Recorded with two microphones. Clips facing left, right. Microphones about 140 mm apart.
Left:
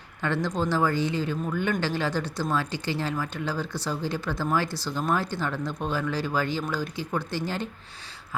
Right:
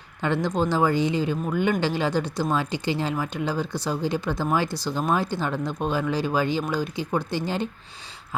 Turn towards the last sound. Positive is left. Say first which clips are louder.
# right 3 dB
turn(degrees=-20)  # may be behind; listen again after turning